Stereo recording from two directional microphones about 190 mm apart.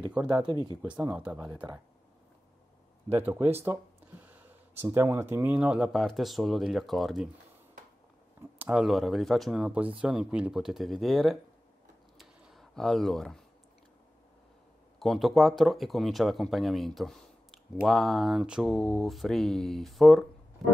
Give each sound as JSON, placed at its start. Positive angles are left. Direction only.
{"t": 0.8, "sound": "speech", "side_deg": -5}
{"t": 1.3, "sound": "speech", "side_deg": -20}
{"t": 3.1, "sound": "speech", "side_deg": -10}
{"t": 8.5, "sound": "speech", "side_deg": -5}
{"t": 12.2, "sound": "a sound", "side_deg": 0}
{"t": 15.0, "sound": "speech", "side_deg": 0}